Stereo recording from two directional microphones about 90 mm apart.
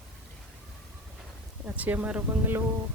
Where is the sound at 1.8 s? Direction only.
20° right (ahead or behind).